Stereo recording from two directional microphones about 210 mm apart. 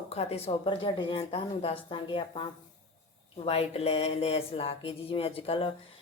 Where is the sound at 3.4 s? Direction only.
30° left (ahead or behind).